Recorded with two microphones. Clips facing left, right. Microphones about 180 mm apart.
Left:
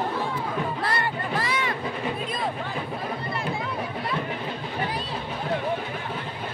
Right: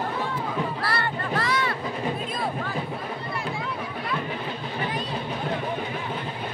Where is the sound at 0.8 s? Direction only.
20° left (ahead or behind).